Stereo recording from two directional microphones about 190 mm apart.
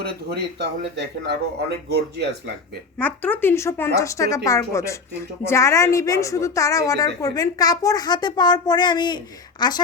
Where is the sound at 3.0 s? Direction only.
10° left (ahead or behind).